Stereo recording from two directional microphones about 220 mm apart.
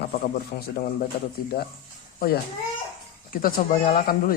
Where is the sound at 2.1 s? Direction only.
40° left (ahead or behind).